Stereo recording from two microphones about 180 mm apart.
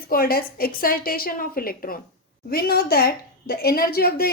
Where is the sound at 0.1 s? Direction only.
55° left (ahead or behind).